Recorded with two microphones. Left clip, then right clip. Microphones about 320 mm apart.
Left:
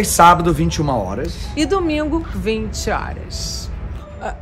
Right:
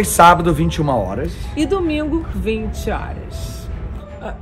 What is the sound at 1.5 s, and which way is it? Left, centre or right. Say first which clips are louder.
A woman's voice: left 1 dB; centre.